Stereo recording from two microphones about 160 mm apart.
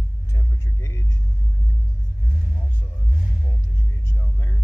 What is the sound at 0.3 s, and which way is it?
Vehicle, 15° left (ahead or behind).